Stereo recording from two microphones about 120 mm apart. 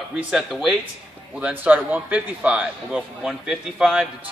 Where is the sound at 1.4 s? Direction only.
15° right (ahead or behind).